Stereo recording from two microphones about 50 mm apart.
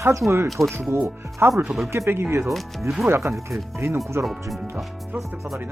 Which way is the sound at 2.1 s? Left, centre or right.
Right.